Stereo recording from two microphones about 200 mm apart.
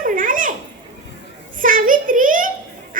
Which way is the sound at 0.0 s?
40° right (ahead or behind).